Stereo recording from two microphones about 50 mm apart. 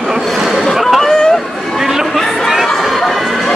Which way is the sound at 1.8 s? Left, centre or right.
Centre.